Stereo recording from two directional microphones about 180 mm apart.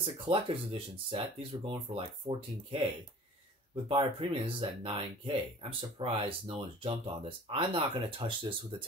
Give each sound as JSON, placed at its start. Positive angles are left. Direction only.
{"t": 0.0, "sound": "speech", "side_deg": -30}
{"t": 3.9, "sound": "speech", "side_deg": -30}